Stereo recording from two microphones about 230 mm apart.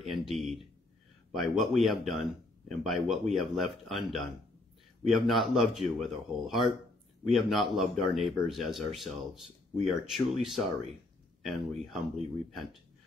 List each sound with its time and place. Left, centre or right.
0.0 s speech: centre